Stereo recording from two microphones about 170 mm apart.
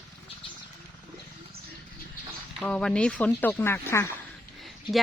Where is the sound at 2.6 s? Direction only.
5° left (ahead or behind).